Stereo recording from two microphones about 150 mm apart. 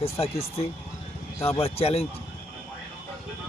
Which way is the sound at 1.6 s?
40° left (ahead or behind).